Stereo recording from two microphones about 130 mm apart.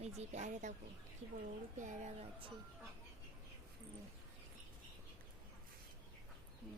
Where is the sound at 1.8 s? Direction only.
70° right (ahead or behind).